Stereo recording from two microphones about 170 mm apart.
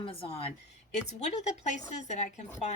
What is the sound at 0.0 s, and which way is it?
Speech, 30° left (ahead or behind).